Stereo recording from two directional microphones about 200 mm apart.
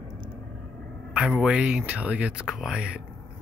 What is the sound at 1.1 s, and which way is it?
Speech, 5° right (ahead or behind).